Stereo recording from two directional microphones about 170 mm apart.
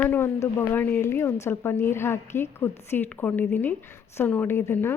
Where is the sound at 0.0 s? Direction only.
10° left (ahead or behind).